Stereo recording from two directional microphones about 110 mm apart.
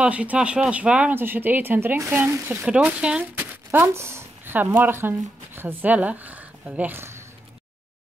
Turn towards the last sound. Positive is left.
turn(degrees=-20)  # may be behind; listen again after turning